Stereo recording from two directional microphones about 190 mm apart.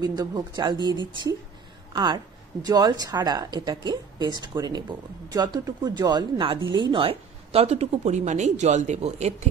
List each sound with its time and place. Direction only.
0.0 s a woman's voice: 20° right (ahead or behind)
2.0 s a woman's voice: 20° right (ahead or behind)